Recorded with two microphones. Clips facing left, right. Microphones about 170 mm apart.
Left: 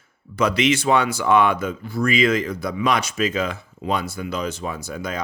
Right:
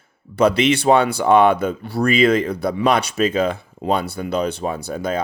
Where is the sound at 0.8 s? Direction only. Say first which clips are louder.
Right 4 dB; 30° right (ahead or behind).